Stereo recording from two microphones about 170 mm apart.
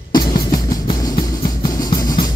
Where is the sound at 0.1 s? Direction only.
25° left (ahead or behind).